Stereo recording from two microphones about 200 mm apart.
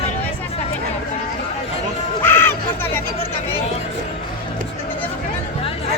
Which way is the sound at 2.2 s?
10° left (ahead or behind).